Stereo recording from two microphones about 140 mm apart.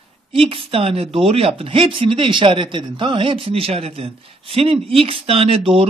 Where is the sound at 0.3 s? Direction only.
40° right (ahead or behind).